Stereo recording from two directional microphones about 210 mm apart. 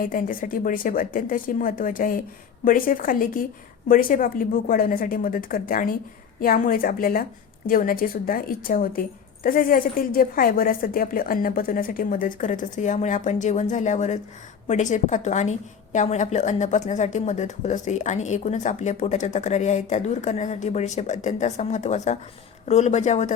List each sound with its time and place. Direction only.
0.0 s a woman's voice: 40° left (ahead or behind)